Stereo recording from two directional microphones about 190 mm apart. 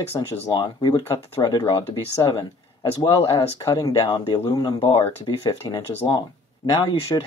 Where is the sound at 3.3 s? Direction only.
15° left (ahead or behind).